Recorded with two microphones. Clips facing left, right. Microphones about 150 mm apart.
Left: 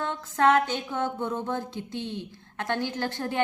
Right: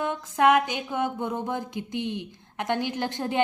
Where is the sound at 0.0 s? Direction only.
15° right (ahead or behind).